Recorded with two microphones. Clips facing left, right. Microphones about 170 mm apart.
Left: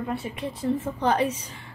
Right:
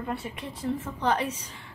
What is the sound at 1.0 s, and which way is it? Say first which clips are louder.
Speech: left 3 dB; 45° left (ahead or behind).